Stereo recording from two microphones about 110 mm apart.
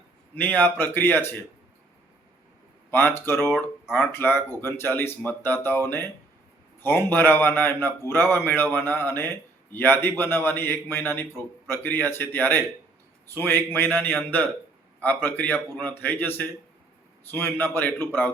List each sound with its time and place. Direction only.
0.3 s a man's voice: 15° left (ahead or behind)
2.9 s a man's voice: 20° left (ahead or behind)